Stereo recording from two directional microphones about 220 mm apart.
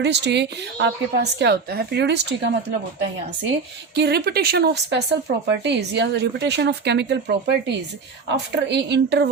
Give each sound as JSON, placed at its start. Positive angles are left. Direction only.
{"t": 0.0, "sound": "a woman's voice", "side_deg": -50}